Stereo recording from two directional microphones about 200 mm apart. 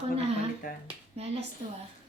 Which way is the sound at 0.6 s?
45° left (ahead or behind).